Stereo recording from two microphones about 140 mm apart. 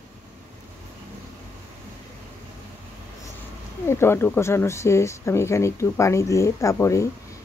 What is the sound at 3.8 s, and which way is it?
Speech, 15° left (ahead or behind).